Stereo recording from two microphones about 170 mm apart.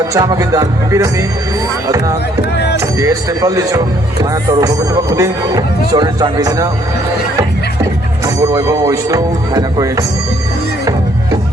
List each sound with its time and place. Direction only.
0.1 s speech: 20° right (ahead or behind)
2.7 s speech: 20° right (ahead or behind)
8.4 s speech: 20° right (ahead or behind)